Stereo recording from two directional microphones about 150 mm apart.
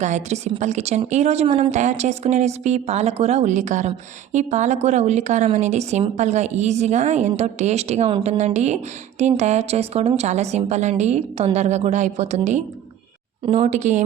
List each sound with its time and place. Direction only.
0.0 s speech: 50° right (ahead or behind)